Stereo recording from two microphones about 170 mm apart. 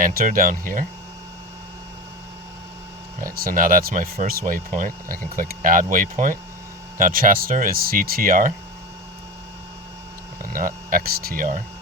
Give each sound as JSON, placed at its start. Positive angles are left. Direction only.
{"t": 0.0, "sound": "speech", "side_deg": -55}
{"t": 3.2, "sound": "speech", "side_deg": -55}
{"t": 10.5, "sound": "speech", "side_deg": -55}